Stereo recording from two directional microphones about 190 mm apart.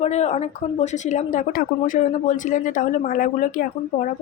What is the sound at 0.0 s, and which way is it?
Speech, 35° left (ahead or behind).